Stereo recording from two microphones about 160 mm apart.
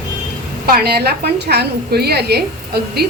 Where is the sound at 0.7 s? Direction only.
80° right.